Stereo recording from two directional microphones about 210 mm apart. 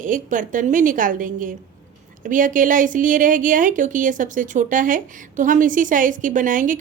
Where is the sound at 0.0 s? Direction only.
40° right (ahead or behind).